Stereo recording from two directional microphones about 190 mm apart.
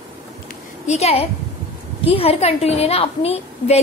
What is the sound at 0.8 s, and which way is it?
A woman's voice, 35° left (ahead or behind).